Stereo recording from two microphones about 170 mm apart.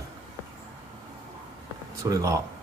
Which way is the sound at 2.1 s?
20° right (ahead or behind).